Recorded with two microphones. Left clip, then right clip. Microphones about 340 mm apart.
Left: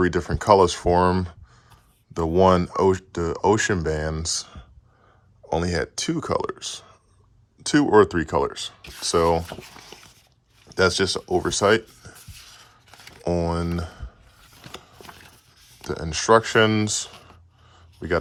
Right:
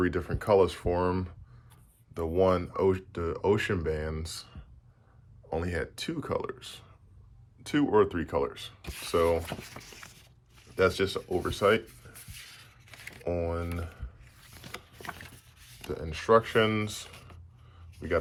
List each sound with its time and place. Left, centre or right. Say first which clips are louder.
0.0 s speech: left 8 dB; centre
10.8 s speech: left 6 dB; left
13.2 s speech: left 7 dB; left
15.9 s speech: left 6 dB; left